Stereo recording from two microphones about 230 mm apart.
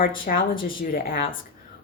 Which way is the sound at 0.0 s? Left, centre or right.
Left.